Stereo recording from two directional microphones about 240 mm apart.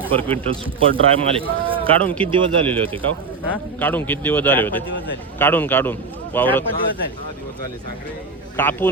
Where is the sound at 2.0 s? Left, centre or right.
Centre.